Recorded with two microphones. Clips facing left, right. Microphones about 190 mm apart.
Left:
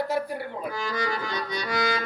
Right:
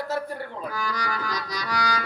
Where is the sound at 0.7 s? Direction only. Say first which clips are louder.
Left 2 dB; 25° left (ahead or behind).